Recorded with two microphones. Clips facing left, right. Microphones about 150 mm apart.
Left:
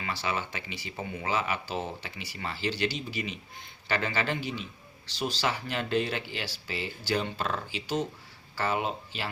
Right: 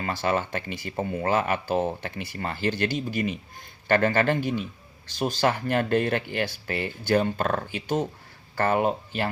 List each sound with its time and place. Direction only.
0.0 s speech: 50° right (ahead or behind)